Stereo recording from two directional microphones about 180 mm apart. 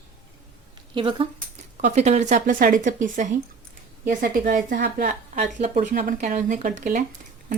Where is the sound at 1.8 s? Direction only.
40° right (ahead or behind).